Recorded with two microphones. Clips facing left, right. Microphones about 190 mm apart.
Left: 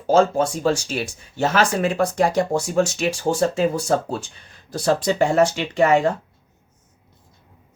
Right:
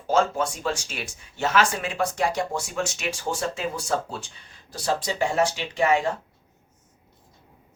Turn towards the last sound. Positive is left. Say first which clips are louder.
# left 5 dB
turn(degrees=45)  # may be behind; listen again after turning